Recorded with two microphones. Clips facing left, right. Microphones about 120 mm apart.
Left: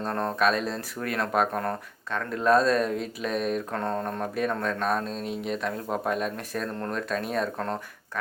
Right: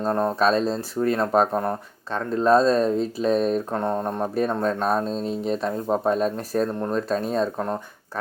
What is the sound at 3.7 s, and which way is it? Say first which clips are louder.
Speech: right 5 dB; 20° right (ahead or behind).